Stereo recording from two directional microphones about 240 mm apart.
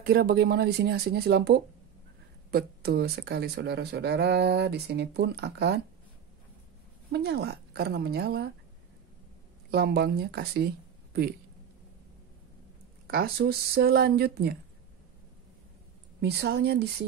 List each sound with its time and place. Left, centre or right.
0.0 s speech: right
7.1 s speech: right
9.7 s speech: right
13.0 s speech: right
16.2 s speech: right